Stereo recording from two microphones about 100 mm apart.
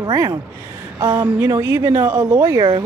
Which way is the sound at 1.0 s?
35° right (ahead or behind).